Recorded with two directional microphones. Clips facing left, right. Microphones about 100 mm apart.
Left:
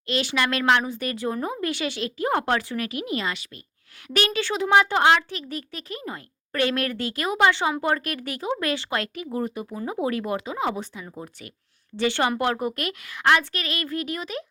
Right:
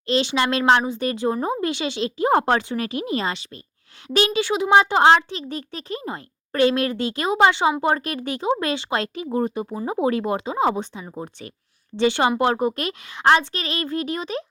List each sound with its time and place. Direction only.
0.0 s a child's voice: 25° right (ahead or behind)